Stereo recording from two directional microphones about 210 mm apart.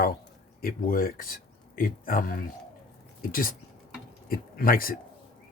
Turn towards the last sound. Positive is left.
turn(degrees=45)  # may be behind; listen again after turning